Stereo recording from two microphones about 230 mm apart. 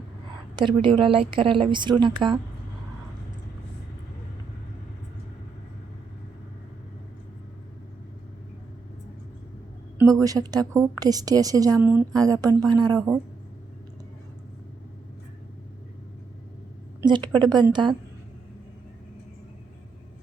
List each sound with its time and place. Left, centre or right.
0.5 s a woman's voice: right
10.0 s a woman's voice: centre
17.0 s a woman's voice: centre